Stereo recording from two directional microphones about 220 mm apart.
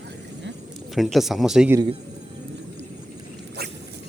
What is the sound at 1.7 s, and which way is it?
Speech, 20° right (ahead or behind).